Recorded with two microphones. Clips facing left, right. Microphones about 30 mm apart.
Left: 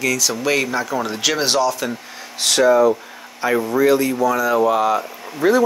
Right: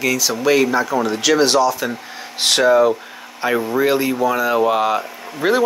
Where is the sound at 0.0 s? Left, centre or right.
Centre.